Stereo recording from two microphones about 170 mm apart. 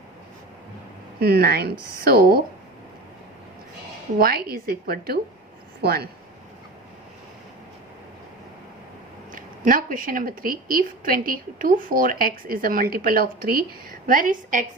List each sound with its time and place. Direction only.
1.2 s a woman's voice: 65° right (ahead or behind)
4.2 s a woman's voice: 60° right (ahead or behind)
9.3 s a woman's voice: 55° right (ahead or behind)